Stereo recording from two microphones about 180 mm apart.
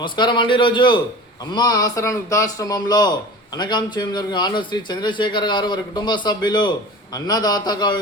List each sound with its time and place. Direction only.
0.0 s a man's voice: 25° left (ahead or behind)